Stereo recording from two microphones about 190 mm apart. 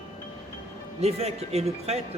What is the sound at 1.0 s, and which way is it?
Speech, 35° right (ahead or behind).